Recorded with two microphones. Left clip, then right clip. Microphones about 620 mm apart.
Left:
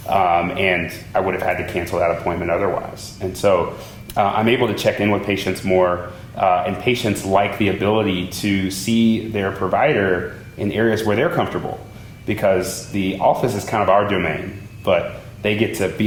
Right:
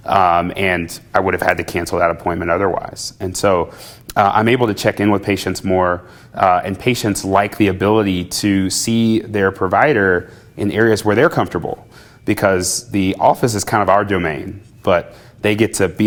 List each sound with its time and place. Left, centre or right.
0.0 s speech: right